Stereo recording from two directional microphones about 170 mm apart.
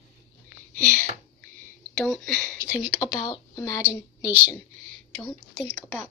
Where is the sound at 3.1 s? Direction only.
20° left (ahead or behind).